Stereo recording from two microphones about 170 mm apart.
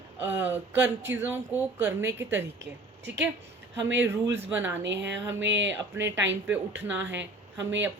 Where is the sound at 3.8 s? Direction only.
90° right.